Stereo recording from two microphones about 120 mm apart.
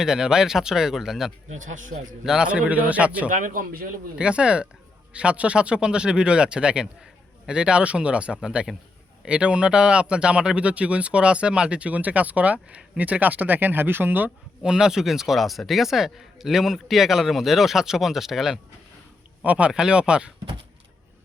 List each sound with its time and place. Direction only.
0.0 s speech: 5° right (ahead or behind)
1.5 s speech: 90° right
2.2 s speech: 5° right (ahead or behind)